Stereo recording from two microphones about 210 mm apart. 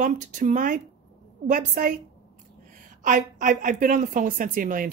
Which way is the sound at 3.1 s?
40° right (ahead or behind).